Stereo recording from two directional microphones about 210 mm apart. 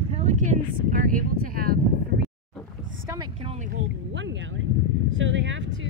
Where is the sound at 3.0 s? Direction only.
20° right (ahead or behind).